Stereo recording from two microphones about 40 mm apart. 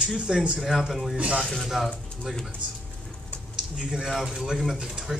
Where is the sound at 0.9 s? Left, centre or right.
Centre.